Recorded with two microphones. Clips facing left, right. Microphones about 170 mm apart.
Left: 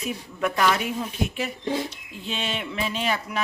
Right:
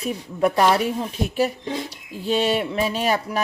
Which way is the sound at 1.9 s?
40° right (ahead or behind).